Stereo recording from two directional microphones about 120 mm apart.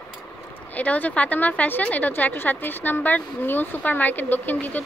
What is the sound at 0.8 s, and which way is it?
A woman's voice, 15° left (ahead or behind).